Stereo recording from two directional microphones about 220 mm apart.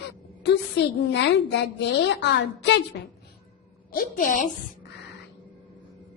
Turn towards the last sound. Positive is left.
turn(degrees=35)  # may be behind; listen again after turning